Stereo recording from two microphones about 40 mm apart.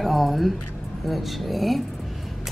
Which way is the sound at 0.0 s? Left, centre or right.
Centre.